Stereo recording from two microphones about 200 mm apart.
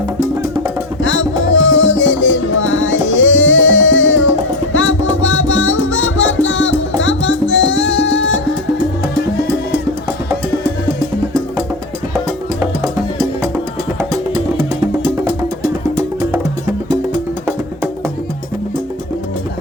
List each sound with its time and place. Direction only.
1.0 s music: 70° left (ahead or behind)